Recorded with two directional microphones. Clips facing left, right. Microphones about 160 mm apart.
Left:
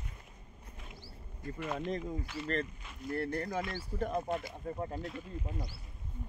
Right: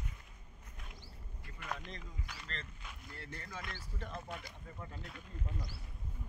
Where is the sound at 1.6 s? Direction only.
Centre (ahead or behind).